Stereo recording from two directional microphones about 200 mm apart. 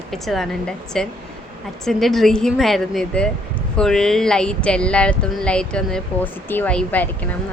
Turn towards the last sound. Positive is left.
turn(degrees=5)  # may be behind; listen again after turning